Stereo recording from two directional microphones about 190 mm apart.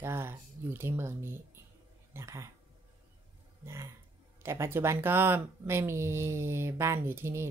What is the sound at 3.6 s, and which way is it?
Speech, 15° right (ahead or behind).